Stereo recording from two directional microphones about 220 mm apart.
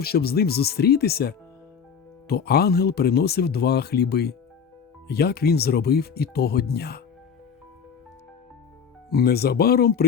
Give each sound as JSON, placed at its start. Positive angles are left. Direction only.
{"t": 0.0, "sound": "speech", "side_deg": 45}
{"t": 9.0, "sound": "speech", "side_deg": 45}